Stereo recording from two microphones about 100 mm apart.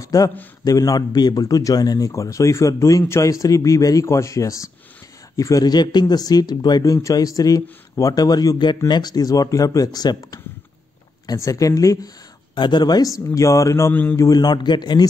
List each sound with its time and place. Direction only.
0.0 s a sound: 35° left (ahead or behind)
0.7 s a man's voice: 40° left (ahead or behind)
12.5 s a man's voice: 50° left (ahead or behind)